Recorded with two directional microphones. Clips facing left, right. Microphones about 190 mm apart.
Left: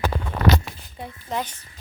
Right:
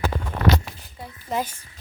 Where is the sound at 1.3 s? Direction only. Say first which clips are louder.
Right 2 dB; 10° right (ahead or behind).